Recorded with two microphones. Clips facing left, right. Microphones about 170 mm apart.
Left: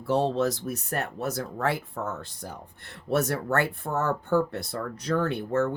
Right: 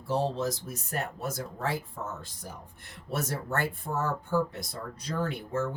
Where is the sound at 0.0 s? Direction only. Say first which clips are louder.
Left 5 dB; 65° left (ahead or behind).